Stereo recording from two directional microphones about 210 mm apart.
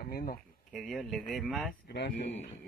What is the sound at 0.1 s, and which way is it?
Speech, 45° left (ahead or behind).